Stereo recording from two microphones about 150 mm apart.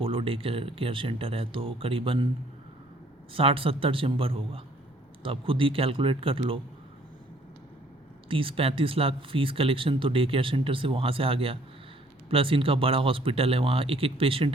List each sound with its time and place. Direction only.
0.0 s speech: 40° right (ahead or behind)
3.3 s speech: 35° right (ahead or behind)
8.3 s speech: 35° right (ahead or behind)